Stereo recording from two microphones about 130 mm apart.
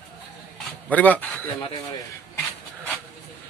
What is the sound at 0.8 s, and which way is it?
Speech, 10° left (ahead or behind).